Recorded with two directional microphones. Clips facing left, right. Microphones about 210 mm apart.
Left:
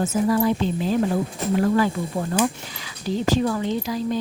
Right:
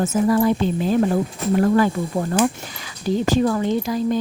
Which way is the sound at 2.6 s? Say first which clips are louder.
Right 4 dB; 50° right (ahead or behind).